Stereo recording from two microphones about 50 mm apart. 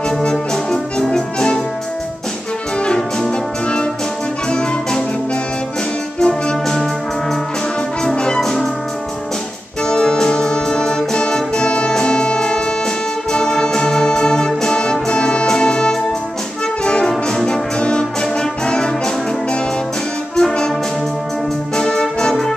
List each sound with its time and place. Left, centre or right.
0.2 s brass instrument: centre
1.0 s music: centre
2.8 s music: centre
6.1 s music: centre
8.4 s music: centre
9.8 s music: centre
17.1 s music: centre
17.5 s music: centre
20.3 s music: centre
21.7 s music: centre